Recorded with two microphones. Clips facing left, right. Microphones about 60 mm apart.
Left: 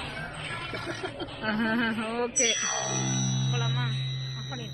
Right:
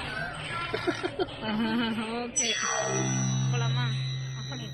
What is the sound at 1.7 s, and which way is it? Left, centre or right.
Speech, left.